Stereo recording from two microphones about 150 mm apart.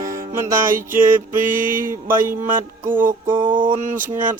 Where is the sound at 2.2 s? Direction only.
65° right (ahead or behind).